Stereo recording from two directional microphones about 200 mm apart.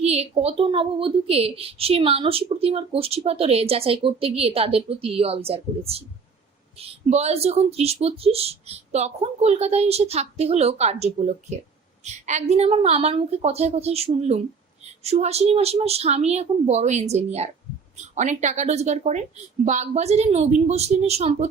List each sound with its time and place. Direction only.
0.0 s a woman's voice: 30° right (ahead or behind)